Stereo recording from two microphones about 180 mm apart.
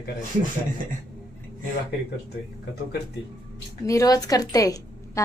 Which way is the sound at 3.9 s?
20° left (ahead or behind).